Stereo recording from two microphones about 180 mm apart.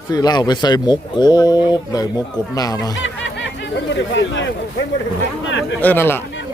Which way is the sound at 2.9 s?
90° left.